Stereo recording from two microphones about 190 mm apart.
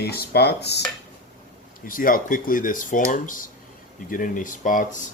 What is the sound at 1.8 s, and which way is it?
Speech, 45° left (ahead or behind).